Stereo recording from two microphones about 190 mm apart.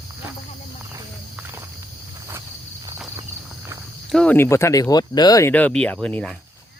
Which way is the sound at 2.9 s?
10° right (ahead or behind).